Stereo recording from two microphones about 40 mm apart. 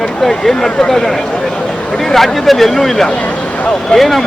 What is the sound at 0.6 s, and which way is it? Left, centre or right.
Speech, left.